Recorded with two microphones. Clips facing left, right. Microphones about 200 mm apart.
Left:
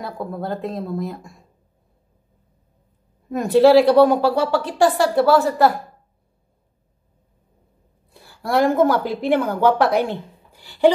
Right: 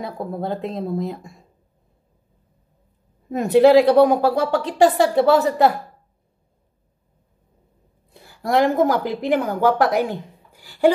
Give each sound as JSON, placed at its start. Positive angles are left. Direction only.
{"t": 0.0, "sound": "a woman's voice", "side_deg": -20}
{"t": 3.3, "sound": "a woman's voice", "side_deg": -20}
{"t": 8.1, "sound": "a sound", "side_deg": -20}
{"t": 8.8, "sound": "speech", "side_deg": -15}